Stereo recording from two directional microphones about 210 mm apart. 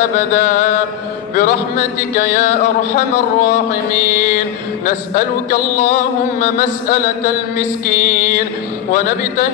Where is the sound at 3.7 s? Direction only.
40° left (ahead or behind).